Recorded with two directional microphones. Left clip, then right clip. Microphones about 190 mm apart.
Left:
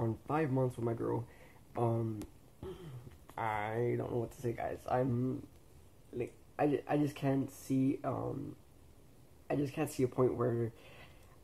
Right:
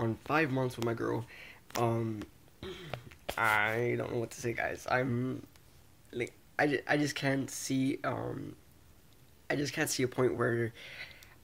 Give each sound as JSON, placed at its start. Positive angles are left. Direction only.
{"t": 0.0, "sound": "speech", "side_deg": -15}
{"t": 2.6, "sound": "a sound", "side_deg": -15}
{"t": 3.3, "sound": "speech", "side_deg": -10}
{"t": 9.5, "sound": "speech", "side_deg": -5}